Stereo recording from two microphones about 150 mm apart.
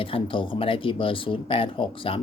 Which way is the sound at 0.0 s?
35° left (ahead or behind).